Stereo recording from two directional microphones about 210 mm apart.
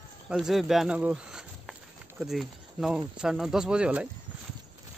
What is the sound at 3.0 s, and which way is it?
Speech, 5° right (ahead or behind).